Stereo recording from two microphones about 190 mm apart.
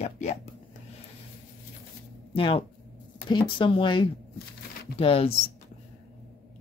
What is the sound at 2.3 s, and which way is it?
Speech, 30° left (ahead or behind).